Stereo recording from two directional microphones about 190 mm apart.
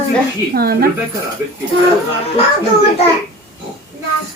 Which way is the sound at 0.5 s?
55° right (ahead or behind).